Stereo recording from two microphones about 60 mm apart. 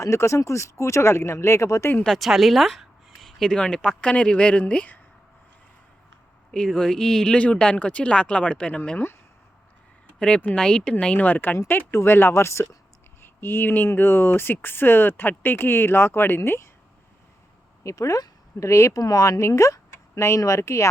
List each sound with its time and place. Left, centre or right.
0.0 s speech: left
2.0 s a woman's voice: centre
3.5 s speech: centre
6.5 s speech: centre
10.2 s speech: centre
11.2 s speech: left
13.2 s speech: left
17.8 s speech: left
18.9 s speech: left
19.4 s speech: left